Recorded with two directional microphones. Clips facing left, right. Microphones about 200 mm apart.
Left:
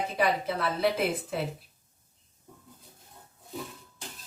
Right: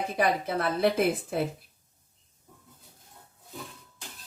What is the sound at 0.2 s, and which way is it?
A woman's voice, 50° right (ahead or behind).